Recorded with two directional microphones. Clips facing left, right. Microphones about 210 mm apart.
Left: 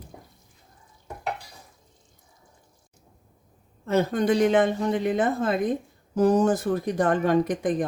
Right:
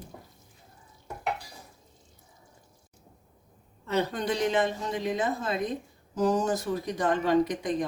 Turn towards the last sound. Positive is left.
turn(degrees=50)  # may be behind; listen again after turning